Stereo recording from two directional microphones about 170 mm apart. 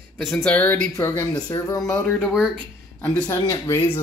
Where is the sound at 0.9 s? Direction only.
20° left (ahead or behind).